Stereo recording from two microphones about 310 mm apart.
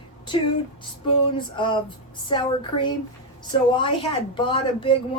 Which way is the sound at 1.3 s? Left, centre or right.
Centre.